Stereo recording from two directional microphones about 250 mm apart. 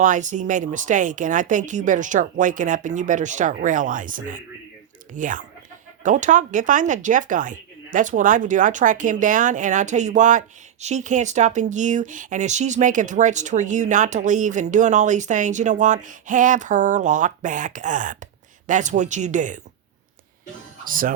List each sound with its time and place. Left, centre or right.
0.0 s speech: right
20.8 s speech: right